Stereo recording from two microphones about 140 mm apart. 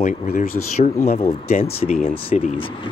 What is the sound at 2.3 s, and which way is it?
Speech, 60° left (ahead or behind).